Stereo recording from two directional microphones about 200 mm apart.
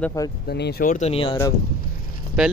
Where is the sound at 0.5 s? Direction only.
55° left (ahead or behind); by 1.4 s 25° left (ahead or behind).